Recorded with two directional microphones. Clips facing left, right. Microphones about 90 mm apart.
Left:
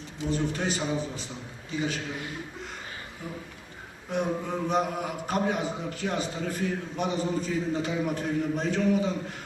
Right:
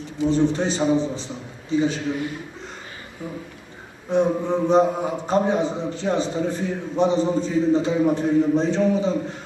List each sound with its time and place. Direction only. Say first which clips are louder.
0.3 s a man's voice: right 8 dB; 25° right (ahead or behind)
4.1 s a man's voice: right 9 dB; 25° right (ahead or behind)